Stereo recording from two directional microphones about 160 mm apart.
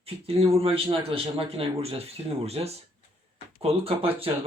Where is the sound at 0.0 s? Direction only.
40° right (ahead or behind).